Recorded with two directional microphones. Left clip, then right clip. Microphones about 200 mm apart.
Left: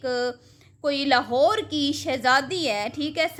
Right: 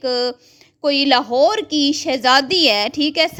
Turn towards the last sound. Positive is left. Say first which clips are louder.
# right 8 dB
turn(degrees=-35)  # may be behind; listen again after turning